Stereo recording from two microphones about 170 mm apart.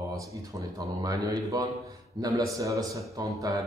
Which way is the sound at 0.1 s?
20° right (ahead or behind).